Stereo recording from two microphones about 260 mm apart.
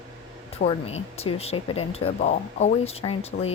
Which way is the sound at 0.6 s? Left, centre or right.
Left.